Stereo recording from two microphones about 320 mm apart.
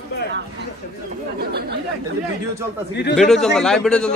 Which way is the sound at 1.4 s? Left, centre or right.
Right.